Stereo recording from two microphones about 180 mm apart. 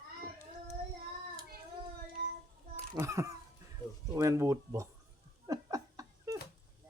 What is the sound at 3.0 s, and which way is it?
Speech, 15° right (ahead or behind).